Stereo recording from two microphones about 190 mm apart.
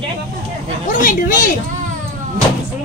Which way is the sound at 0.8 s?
45° left (ahead or behind).